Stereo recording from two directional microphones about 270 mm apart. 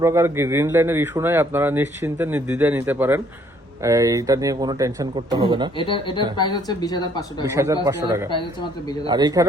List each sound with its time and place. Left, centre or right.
0.0 s speech: centre
5.8 s speech: centre
7.4 s speech: centre